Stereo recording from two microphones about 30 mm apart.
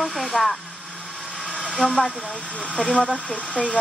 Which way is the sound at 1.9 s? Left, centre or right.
Left.